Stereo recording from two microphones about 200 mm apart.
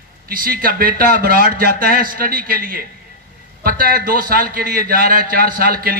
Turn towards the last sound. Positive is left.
turn(degrees=-50)  # may be behind; listen again after turning